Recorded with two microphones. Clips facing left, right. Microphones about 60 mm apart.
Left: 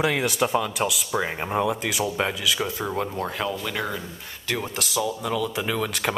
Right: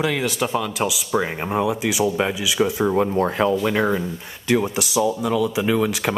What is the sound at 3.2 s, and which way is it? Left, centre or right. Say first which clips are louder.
Speech: right 9 dB; right.